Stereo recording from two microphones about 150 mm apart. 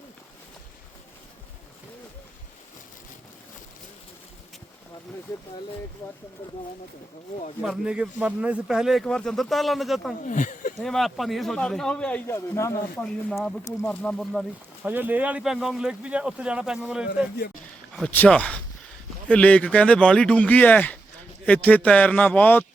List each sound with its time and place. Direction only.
7.6 s a man's voice: 5° right (ahead or behind)
10.2 s speech: 60° left (ahead or behind)
10.8 s a man's voice: centre (ahead or behind); by 12.8 s 20° left (ahead or behind)
13.0 s a man's voice: 5° left (ahead or behind)
14.8 s a man's voice: 10° right (ahead or behind)
17.3 s speech: 80° left
17.9 s speech: 10° left (ahead or behind)